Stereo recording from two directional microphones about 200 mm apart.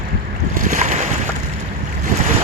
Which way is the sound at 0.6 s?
40° right (ahead or behind).